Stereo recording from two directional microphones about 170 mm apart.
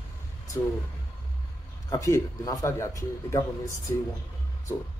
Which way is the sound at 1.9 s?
20° left (ahead or behind).